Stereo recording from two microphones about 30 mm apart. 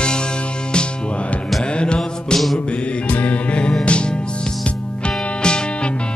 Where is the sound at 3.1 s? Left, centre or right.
Left.